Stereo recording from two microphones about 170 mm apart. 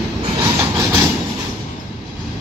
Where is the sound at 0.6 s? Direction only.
20° right (ahead or behind).